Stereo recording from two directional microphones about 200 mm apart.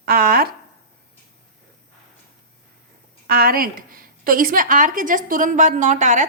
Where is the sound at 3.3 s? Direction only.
50° right (ahead or behind).